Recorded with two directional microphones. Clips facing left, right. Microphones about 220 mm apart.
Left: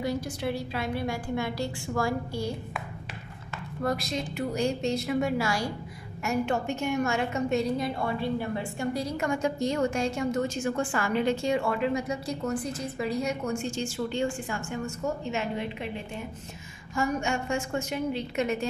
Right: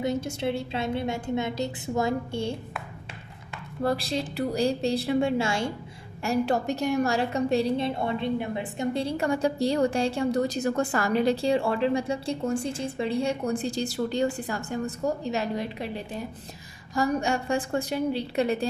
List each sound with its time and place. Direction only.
0.0 s a woman's voice: 25° right (ahead or behind)
3.8 s a woman's voice: 30° right (ahead or behind)